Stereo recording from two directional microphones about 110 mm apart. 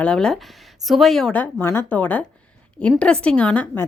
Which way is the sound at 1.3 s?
20° left (ahead or behind).